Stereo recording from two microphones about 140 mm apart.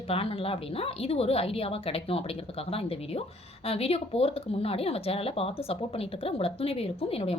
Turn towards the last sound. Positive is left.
turn(degrees=45)  # may be behind; listen again after turning